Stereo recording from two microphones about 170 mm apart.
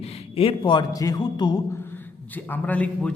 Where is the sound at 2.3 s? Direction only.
10° left (ahead or behind).